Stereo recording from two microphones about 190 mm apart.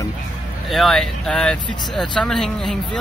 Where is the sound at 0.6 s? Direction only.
Centre (ahead or behind).